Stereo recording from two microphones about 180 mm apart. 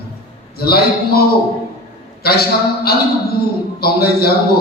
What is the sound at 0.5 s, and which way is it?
Speech, 60° left (ahead or behind).